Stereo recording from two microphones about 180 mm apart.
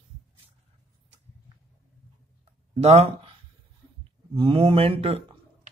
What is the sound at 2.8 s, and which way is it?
Speech, 35° right (ahead or behind).